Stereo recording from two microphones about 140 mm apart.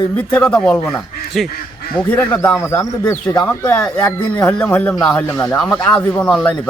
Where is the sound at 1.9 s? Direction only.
10° left (ahead or behind).